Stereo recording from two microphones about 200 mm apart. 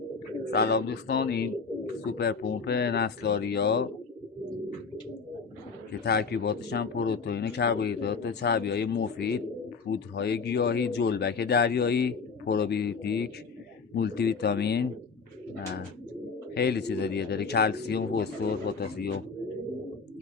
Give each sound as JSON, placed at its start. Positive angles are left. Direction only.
{"t": 0.5, "sound": "speech", "side_deg": 55}
{"t": 6.0, "sound": "speech", "side_deg": 55}
{"t": 16.6, "sound": "speech", "side_deg": 55}